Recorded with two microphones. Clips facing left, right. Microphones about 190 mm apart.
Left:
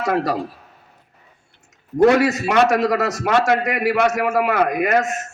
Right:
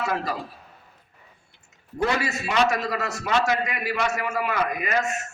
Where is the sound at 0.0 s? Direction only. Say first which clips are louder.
Left 7 dB; 75° left (ahead or behind).